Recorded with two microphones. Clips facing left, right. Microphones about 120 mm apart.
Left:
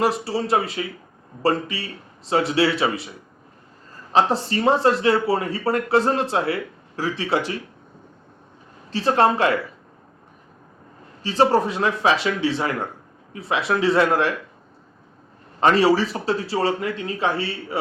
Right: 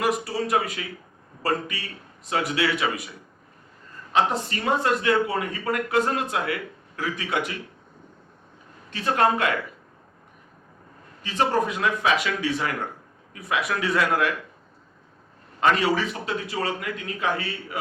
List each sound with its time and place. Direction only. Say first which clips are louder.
0.0 s speech: left 3 dB; 30° left (ahead or behind)
4.1 s speech: left 4 dB; 30° left (ahead or behind)
8.9 s speech: left 4 dB; 30° left (ahead or behind)
11.2 s speech: left 5 dB; 30° left (ahead or behind)
15.6 s speech: left 5 dB; 30° left (ahead or behind)